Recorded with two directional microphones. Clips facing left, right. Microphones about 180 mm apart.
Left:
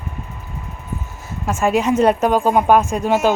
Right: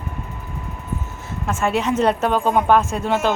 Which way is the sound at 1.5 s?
10° left (ahead or behind).